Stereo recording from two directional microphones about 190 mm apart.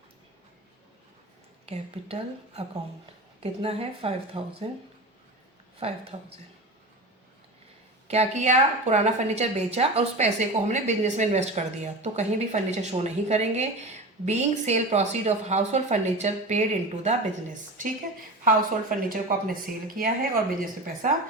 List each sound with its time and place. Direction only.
1.6 s a woman's voice: 35° right (ahead or behind)
5.8 s a woman's voice: 30° right (ahead or behind)
8.0 s a woman's voice: 35° right (ahead or behind)
18.4 s a woman's voice: 45° right (ahead or behind)